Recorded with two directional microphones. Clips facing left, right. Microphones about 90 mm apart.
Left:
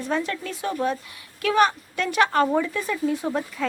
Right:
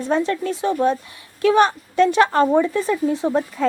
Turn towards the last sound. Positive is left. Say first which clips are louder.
# right 5 dB
turn(degrees=-25)  # may be behind; listen again after turning